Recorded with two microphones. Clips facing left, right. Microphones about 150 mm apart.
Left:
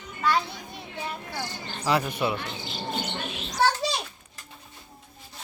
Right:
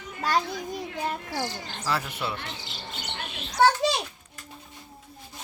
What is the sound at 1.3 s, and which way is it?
Speech, 90° right.